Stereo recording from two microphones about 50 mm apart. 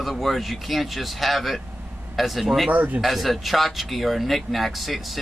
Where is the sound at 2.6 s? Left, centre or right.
Right.